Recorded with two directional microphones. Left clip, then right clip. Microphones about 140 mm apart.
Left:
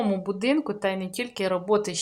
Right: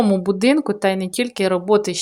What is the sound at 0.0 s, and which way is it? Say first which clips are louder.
Speech: right 9 dB; 45° right (ahead or behind).